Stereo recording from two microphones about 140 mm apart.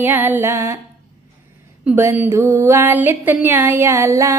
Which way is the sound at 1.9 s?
15° right (ahead or behind).